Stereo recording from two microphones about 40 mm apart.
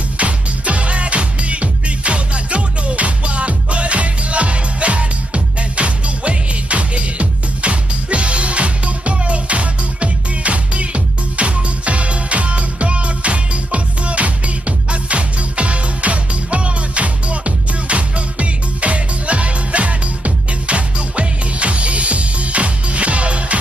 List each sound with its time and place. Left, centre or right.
0.2 s music: right